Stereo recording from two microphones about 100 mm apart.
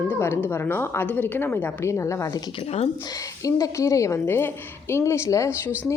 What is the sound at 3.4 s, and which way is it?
A woman's voice, 35° left (ahead or behind).